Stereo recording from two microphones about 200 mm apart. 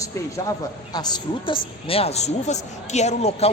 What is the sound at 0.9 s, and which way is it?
A woman's voice, 20° left (ahead or behind).